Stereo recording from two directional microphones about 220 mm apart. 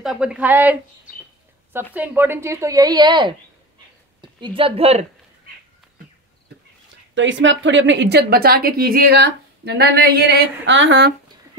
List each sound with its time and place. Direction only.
0.0 s speech: centre (ahead or behind)
2.0 s a woman's voice: 10° right (ahead or behind); by 5.0 s 25° right (ahead or behind)
7.2 s a woman's voice: 55° right (ahead or behind)